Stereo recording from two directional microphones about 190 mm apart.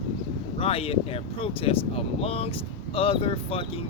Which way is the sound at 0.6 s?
30° left (ahead or behind).